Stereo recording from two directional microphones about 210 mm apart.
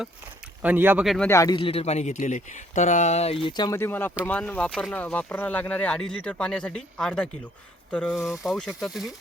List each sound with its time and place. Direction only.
0.6 s speech: 10° right (ahead or behind)
1.3 s speech: 15° left (ahead or behind); by 9.1 s centre (ahead or behind)